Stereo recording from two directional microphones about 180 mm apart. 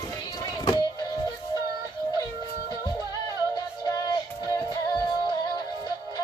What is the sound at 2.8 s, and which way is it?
Music, 20° left (ahead or behind).